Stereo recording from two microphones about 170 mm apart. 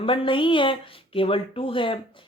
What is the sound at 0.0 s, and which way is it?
Speech, 30° left (ahead or behind).